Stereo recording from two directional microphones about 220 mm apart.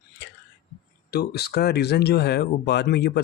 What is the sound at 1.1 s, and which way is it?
Speech, 45° left (ahead or behind).